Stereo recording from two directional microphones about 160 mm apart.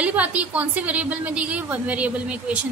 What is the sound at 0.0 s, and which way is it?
A woman's voice, 10° right (ahead or behind).